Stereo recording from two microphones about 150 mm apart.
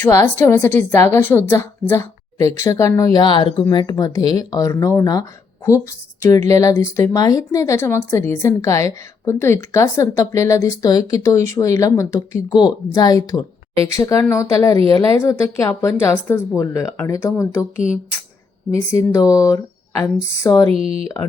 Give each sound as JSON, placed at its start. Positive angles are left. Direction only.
{"t": 0.1, "sound": "a woman's voice", "side_deg": 15}
{"t": 18.7, "sound": "speech", "side_deg": 20}
{"t": 20.7, "sound": "speech", "side_deg": -40}